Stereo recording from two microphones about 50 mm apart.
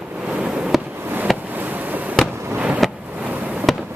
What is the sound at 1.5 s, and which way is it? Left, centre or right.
Fireworks, right.